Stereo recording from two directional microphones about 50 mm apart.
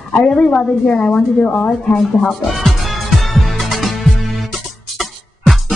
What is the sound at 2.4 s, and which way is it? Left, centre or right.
Music, centre.